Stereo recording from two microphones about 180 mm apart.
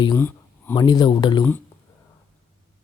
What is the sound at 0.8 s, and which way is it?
Speech, 25° left (ahead or behind).